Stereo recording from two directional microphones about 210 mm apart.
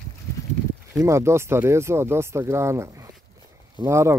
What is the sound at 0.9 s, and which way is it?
Speech, 15° right (ahead or behind).